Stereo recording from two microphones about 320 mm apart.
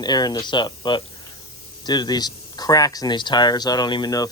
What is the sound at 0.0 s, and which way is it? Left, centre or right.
Speech, centre.